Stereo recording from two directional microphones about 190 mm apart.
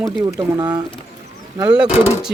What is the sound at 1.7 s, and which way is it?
Speech, 5° right (ahead or behind).